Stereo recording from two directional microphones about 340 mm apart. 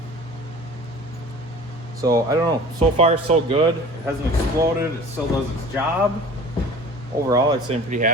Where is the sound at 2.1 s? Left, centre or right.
Centre.